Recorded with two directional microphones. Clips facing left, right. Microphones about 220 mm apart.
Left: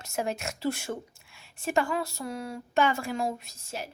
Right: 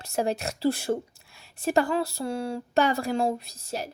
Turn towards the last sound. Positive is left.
turn(degrees=-35)  # may be behind; listen again after turning